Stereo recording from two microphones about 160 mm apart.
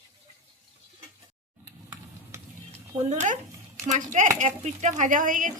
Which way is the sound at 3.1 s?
50° right (ahead or behind).